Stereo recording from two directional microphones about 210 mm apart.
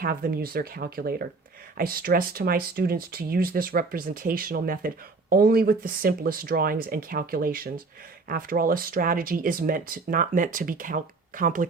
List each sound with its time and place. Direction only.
0.0 s speech: 45° right (ahead or behind)